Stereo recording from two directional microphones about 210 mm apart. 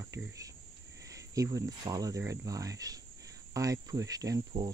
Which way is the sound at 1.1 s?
15° right (ahead or behind).